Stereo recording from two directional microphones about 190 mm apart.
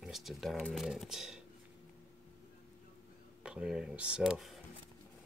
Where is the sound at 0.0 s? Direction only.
Centre (ahead or behind).